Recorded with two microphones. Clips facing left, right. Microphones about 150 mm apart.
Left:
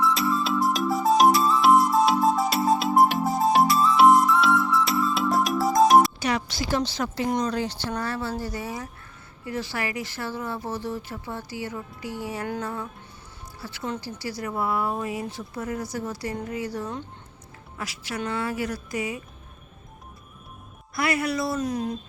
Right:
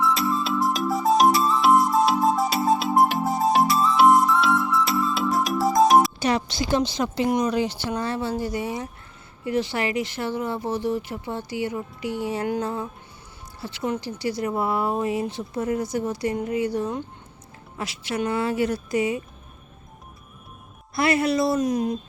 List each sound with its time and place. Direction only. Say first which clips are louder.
0.0 s music: right 1 dB; centre (ahead or behind)
6.1 s a woman's voice: right 3 dB; 25° right (ahead or behind)
20.9 s speech: right 4 dB; 25° right (ahead or behind)